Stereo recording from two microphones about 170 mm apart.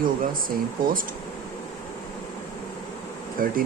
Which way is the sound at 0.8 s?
55° right (ahead or behind).